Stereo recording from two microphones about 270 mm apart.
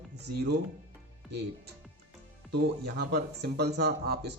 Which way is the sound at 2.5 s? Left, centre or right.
Right.